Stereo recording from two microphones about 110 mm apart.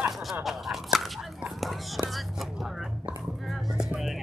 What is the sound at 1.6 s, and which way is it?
Whispering, centre (ahead or behind).